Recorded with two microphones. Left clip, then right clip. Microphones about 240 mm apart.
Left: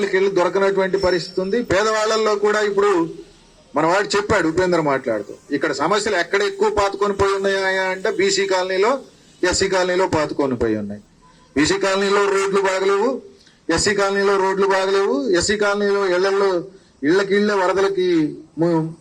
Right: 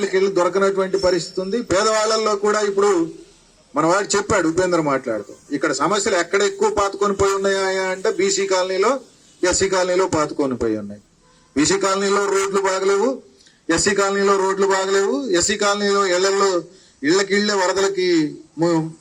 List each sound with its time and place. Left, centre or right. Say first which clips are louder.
0.1 s a man's voice: right 1 dB; right
13.9 s a man's voice: even; right
14.7 s a man's voice: left 1 dB; right